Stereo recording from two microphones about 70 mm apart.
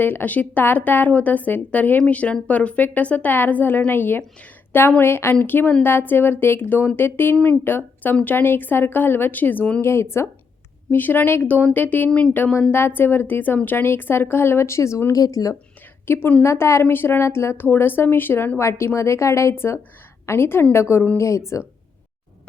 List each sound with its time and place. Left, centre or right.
0.0 s a woman's voice: left
9.8 s a woman's voice: left
10.9 s a woman's voice: left
16.0 s a woman's voice: left
16.8 s a woman's voice: left